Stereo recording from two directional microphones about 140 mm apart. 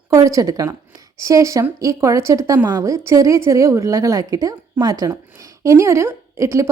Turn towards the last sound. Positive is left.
turn(degrees=-20)  # may be behind; listen again after turning